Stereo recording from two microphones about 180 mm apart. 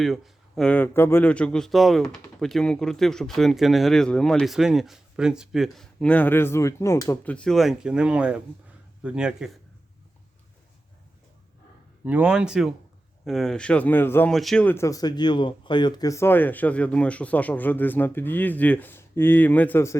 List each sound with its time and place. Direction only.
0.0 s speech: centre (ahead or behind)
12.0 s speech: 5° right (ahead or behind); by 20.0 s 15° left (ahead or behind)